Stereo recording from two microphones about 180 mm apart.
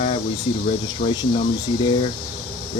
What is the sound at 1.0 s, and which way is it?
Speech, 50° left (ahead or behind).